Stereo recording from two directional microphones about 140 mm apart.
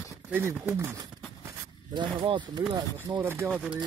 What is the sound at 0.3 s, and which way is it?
Speech, 15° right (ahead or behind).